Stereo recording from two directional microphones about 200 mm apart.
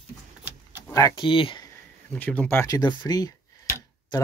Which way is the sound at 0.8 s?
15° left (ahead or behind).